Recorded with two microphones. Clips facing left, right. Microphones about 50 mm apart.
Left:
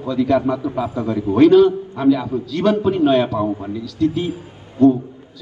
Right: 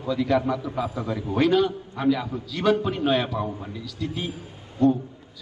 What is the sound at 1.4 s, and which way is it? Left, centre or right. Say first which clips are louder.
A man's voice: left 10 dB; centre.